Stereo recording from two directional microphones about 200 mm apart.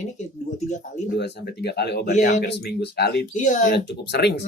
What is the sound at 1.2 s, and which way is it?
Speech, 55° left (ahead or behind).